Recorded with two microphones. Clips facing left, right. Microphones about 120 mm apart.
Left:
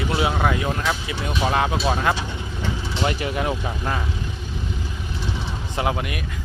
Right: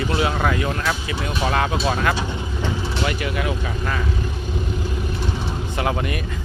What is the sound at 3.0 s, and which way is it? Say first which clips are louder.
Speech: left 2 dB; 30° left (ahead or behind).